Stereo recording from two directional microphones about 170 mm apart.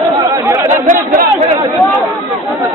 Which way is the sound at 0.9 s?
50° right (ahead or behind).